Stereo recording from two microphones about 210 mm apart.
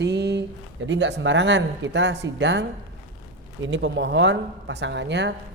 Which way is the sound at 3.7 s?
60° right (ahead or behind).